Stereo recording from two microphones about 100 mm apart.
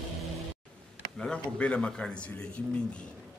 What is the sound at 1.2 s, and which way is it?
Speech, 10° left (ahead or behind).